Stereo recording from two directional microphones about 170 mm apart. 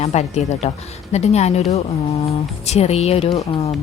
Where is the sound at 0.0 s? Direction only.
40° left (ahead or behind).